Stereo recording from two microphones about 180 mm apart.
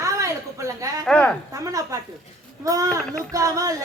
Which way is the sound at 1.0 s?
5° left (ahead or behind).